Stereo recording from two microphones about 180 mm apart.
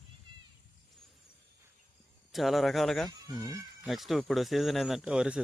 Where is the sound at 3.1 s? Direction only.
15° right (ahead or behind).